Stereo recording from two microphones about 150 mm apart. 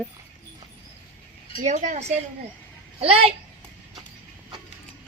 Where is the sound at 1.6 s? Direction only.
55° right (ahead or behind).